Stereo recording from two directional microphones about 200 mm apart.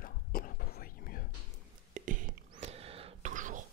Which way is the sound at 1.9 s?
40° right (ahead or behind).